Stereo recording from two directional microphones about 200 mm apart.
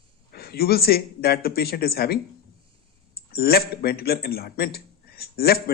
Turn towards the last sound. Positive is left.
turn(degrees=50)  # may be behind; listen again after turning